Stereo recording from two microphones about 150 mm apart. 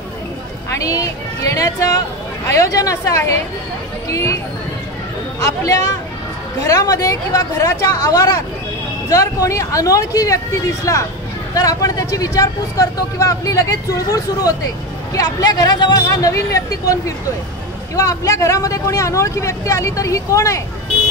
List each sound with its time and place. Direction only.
0.7 s speech: 20° left (ahead or behind)
5.4 s speech: 25° left (ahead or behind)